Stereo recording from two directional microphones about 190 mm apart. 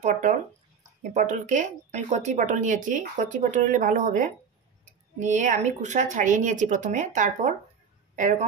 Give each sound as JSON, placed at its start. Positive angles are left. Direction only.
{"t": 0.0, "sound": "speech", "side_deg": -40}